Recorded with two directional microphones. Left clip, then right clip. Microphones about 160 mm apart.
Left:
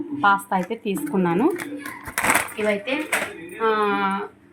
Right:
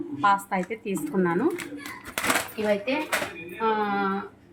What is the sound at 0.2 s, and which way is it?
A woman's voice, 25° left (ahead or behind).